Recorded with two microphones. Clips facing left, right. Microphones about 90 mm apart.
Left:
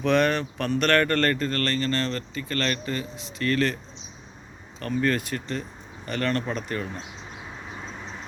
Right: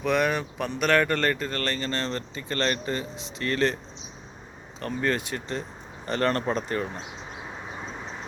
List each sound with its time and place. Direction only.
0.0 s speech: 5° right (ahead or behind); by 3.8 s 25° right (ahead or behind)
4.8 s speech: 25° right (ahead or behind)
6.1 s speech: 30° right (ahead or behind)